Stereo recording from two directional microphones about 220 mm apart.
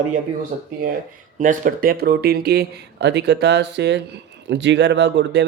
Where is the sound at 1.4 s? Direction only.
35° right (ahead or behind).